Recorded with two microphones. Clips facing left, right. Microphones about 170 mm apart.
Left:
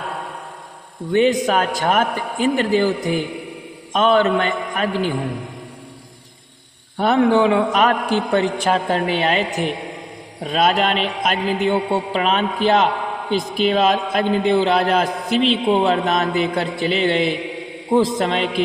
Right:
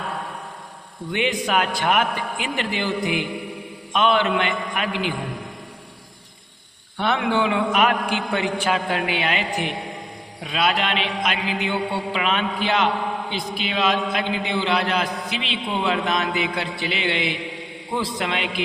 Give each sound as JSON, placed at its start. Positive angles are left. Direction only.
{"t": 1.1, "sound": "a man's voice", "side_deg": 40}
{"t": 6.9, "sound": "a man's voice", "side_deg": 40}